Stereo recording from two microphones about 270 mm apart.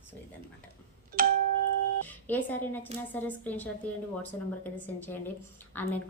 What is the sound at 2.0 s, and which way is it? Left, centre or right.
A woman's voice, centre.